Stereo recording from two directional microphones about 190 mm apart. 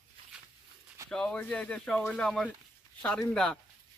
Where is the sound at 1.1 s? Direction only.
5° left (ahead or behind).